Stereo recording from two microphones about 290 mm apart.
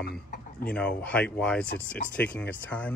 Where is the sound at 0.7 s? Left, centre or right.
Centre.